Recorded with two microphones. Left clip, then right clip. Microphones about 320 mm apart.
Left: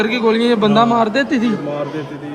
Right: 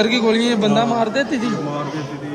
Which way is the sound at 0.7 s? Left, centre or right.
Left.